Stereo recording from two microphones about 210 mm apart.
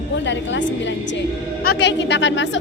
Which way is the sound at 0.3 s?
60° left (ahead or behind).